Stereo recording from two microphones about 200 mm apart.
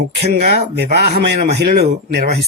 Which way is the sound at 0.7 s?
55° right (ahead or behind).